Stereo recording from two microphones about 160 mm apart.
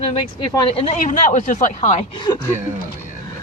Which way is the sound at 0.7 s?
40° left (ahead or behind).